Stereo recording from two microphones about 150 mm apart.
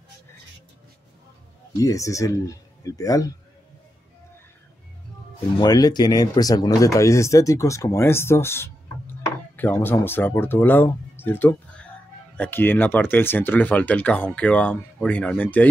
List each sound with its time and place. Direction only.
1.8 s speech: 20° left (ahead or behind)
5.6 s speech: 25° left (ahead or behind); by 15.7 s 10° left (ahead or behind)